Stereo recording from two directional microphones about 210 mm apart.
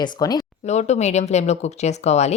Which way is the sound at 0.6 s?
35° left (ahead or behind).